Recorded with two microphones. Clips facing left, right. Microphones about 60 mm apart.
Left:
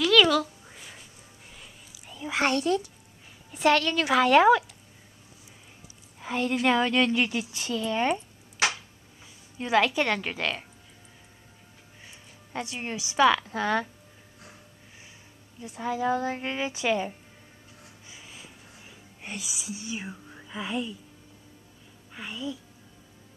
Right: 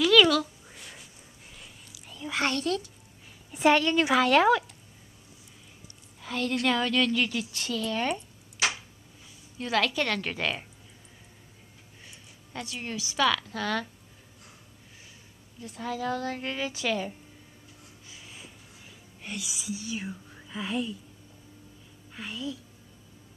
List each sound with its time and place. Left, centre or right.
0.0 s a sound: centre
2.4 s a woman's voice: left
3.5 s a woman's voice: centre
4.1 s speech: centre
6.1 s a woman's voice: left
7.5 s a woman's voice: centre
9.6 s a woman's voice: centre
10.2 s speech: centre
12.5 s a woman's voice: left
15.6 s a woman's voice: centre
18.2 s a sound: centre
18.9 s music: left
19.6 s speech: centre
22.1 s a woman's voice: centre